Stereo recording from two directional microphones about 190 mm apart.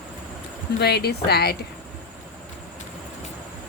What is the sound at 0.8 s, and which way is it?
Speech, 60° left (ahead or behind).